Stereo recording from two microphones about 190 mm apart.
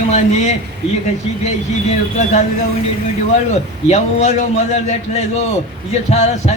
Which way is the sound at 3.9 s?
35° left (ahead or behind).